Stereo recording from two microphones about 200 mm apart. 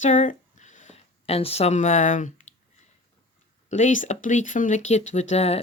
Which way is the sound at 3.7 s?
35° left (ahead or behind).